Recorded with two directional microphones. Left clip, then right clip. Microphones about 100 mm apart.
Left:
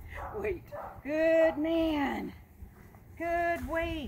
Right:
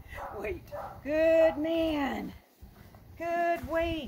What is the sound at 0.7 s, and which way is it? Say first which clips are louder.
Speech: right 2 dB; 30° right (ahead or behind).